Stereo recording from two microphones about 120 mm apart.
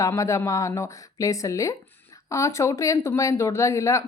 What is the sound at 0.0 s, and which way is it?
Speech, 25° left (ahead or behind).